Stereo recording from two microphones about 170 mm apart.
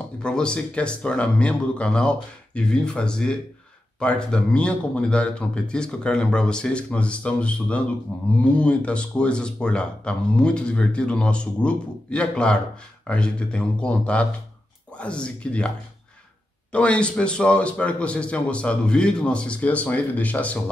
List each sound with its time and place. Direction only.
0.2 s a man's voice: 5° left (ahead or behind)
16.7 s a man's voice: 5° left (ahead or behind)